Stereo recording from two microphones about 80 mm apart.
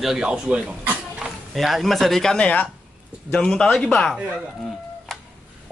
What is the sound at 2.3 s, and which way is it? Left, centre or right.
Speech, centre.